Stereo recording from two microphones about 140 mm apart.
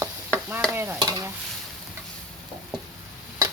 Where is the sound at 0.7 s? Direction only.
15° right (ahead or behind).